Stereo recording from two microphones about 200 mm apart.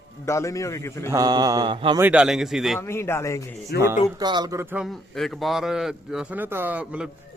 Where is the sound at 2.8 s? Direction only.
15° left (ahead or behind).